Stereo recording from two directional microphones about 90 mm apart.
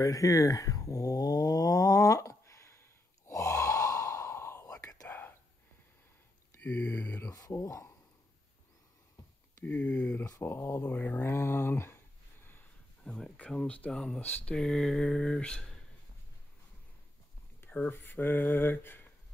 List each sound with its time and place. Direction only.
0.0 s a sound: 40° left (ahead or behind)
5.0 s whispering: 20° left (ahead or behind)
6.6 s speech: 15° left (ahead or behind)
7.2 s speech: 35° left (ahead or behind)
9.7 s speech: 15° left (ahead or behind)
10.4 s speech: 25° left (ahead or behind)
13.0 s speech: 10° left (ahead or behind)
14.2 s speech: 20° left (ahead or behind)
14.5 s speech: 5° left (ahead or behind)
17.6 s speech: 20° left (ahead or behind)